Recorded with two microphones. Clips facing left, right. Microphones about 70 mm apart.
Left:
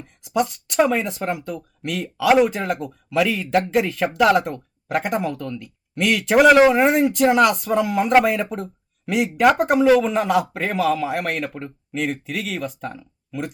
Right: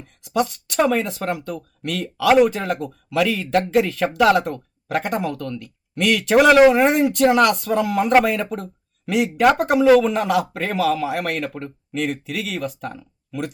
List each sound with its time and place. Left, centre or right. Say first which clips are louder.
0.3 s speech: even; centre